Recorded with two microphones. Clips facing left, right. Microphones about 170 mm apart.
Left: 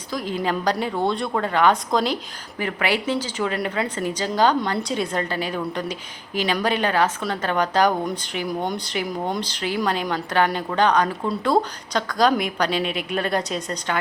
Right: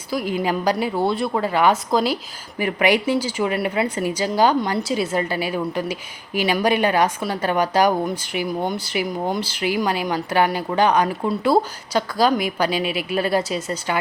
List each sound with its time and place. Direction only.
0.1 s speech: 10° right (ahead or behind)
2.6 s speech: 15° right (ahead or behind)